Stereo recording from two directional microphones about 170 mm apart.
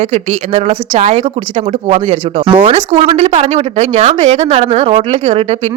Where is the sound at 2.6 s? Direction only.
35° right (ahead or behind).